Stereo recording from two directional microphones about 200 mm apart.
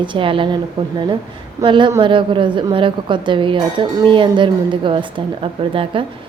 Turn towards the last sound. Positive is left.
turn(degrees=-25)  # may be behind; listen again after turning